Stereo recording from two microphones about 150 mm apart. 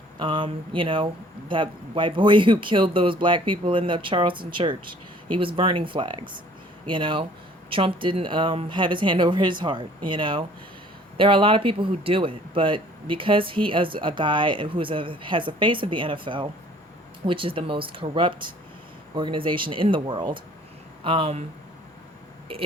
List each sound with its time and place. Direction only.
0.2 s speech: 35° right (ahead or behind)